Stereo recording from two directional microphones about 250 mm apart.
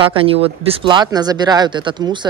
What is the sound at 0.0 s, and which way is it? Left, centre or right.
Speech, right.